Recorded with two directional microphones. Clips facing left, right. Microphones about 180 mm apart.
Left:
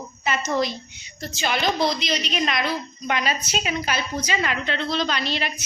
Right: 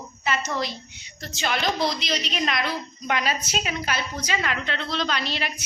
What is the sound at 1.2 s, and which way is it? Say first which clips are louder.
A woman's voice: left 2 dB; 5° left (ahead or behind).